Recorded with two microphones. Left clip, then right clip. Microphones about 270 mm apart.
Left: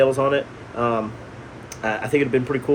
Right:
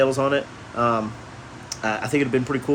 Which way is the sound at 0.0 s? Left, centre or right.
Right.